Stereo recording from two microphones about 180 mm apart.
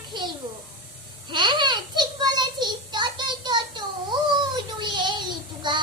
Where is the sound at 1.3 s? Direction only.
25° right (ahead or behind).